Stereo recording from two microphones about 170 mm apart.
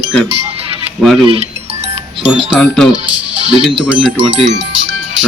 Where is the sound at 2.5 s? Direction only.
Centre (ahead or behind).